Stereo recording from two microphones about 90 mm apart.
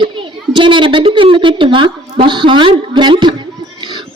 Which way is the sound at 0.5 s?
65° right (ahead or behind).